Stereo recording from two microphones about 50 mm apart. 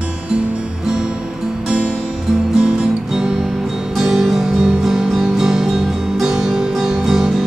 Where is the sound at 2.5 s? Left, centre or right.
Centre.